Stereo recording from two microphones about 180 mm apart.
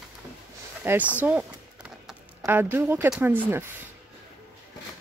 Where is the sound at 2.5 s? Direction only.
10° right (ahead or behind).